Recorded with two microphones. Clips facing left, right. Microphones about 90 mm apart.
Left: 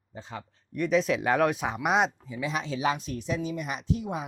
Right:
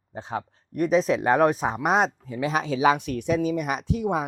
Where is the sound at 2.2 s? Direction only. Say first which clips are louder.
Right 6 dB; 55° right (ahead or behind).